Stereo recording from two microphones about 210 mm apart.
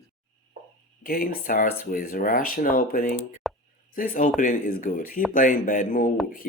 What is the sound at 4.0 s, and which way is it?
Speech, 40° left (ahead or behind).